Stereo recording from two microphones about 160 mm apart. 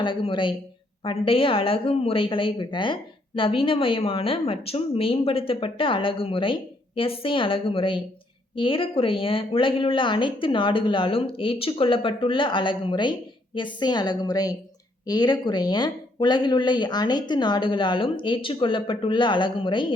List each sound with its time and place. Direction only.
0.0 s a woman's voice: 30° left (ahead or behind)